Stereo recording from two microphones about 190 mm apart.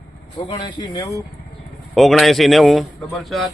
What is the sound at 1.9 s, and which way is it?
Speech, centre (ahead or behind).